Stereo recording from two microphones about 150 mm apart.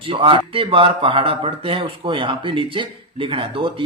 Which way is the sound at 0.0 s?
35° right (ahead or behind).